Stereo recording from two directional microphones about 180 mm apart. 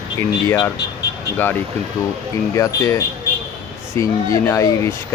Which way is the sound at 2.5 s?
20° left (ahead or behind).